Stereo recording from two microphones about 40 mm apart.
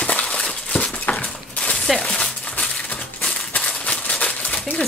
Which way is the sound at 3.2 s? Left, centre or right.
Centre.